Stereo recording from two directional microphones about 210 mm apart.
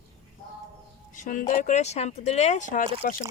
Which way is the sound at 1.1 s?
40° left (ahead or behind).